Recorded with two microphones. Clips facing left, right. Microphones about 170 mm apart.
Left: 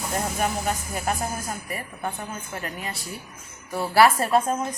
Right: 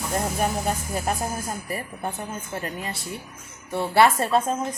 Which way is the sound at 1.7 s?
30° right (ahead or behind).